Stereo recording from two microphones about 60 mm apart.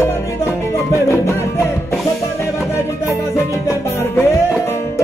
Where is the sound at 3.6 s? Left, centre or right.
Left.